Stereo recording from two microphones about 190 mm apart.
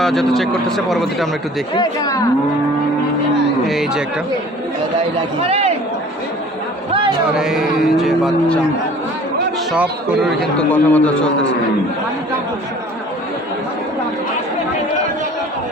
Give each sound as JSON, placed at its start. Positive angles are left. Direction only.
{"t": 0.0, "sound": "speech", "side_deg": 0}
{"t": 1.7, "sound": "speech", "side_deg": 20}
{"t": 3.7, "sound": "speech", "side_deg": 0}
{"t": 5.5, "sound": "a man's voice", "side_deg": -35}
{"t": 7.3, "sound": "speech", "side_deg": 0}
{"t": 9.7, "sound": "speech", "side_deg": -5}
{"t": 10.6, "sound": "a man's voice", "side_deg": 10}